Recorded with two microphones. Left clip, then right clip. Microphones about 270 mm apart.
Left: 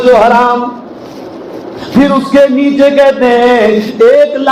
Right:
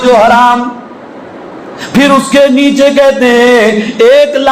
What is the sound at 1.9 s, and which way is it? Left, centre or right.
A man's voice, right.